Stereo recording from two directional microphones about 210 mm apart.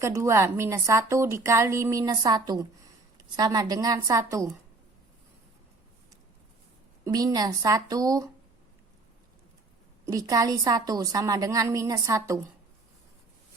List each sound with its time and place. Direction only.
0.0 s a woman's voice: 15° right (ahead or behind)
7.0 s a woman's voice: 15° right (ahead or behind)
10.1 s a woman's voice: 15° right (ahead or behind)